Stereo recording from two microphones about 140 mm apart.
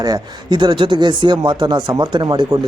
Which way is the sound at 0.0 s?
30° right (ahead or behind).